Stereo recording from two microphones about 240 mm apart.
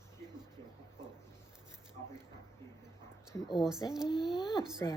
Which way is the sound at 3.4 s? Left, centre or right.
Centre.